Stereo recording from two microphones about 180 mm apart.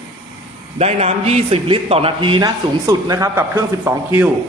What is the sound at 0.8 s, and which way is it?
A man's voice, 35° right (ahead or behind).